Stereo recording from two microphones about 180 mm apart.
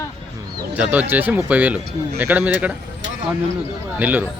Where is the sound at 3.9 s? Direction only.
10° right (ahead or behind).